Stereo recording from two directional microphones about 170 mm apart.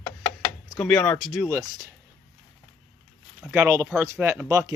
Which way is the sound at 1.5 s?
20° right (ahead or behind).